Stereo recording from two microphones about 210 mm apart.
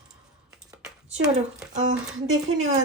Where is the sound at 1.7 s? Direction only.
35° right (ahead or behind).